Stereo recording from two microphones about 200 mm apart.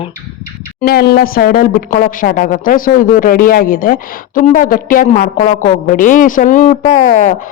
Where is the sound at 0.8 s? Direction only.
50° left (ahead or behind).